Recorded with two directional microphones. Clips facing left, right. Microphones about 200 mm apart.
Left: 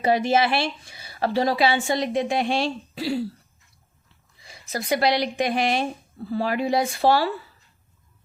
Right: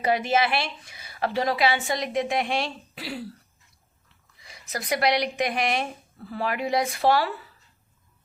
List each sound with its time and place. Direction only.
0.0 s a woman's voice: 30° left (ahead or behind)
4.4 s a woman's voice: 30° left (ahead or behind)